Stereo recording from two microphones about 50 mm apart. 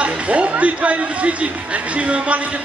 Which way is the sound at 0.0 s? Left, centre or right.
Right.